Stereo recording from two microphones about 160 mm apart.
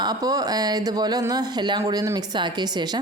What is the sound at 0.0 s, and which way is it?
A woman's voice, 25° right (ahead or behind).